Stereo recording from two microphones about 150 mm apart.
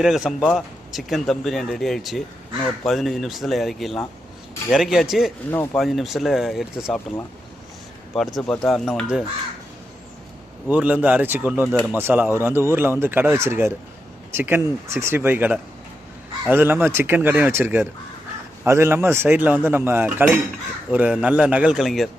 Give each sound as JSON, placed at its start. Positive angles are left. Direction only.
{"t": 0.0, "sound": "speech", "side_deg": 0}
{"t": 8.4, "sound": "speech", "side_deg": 5}
{"t": 10.7, "sound": "speech", "side_deg": -10}